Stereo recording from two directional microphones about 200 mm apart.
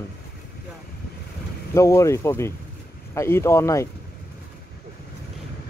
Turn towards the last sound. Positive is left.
turn(degrees=15)  # may be behind; listen again after turning